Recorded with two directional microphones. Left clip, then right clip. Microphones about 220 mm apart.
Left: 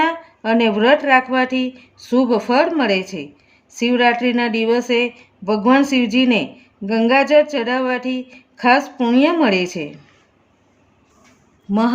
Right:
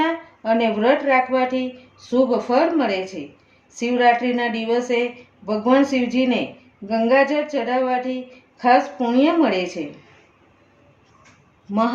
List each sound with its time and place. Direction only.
0.0 s a woman's voice: 50° left (ahead or behind)